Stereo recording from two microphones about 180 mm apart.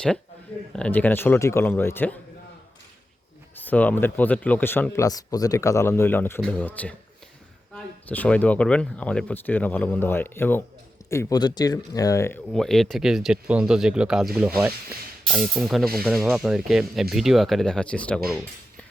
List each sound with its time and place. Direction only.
0.8 s a man's voice: 10° left (ahead or behind)
3.5 s a man's voice: 10° left (ahead or behind)
12.5 s speech: centre (ahead or behind)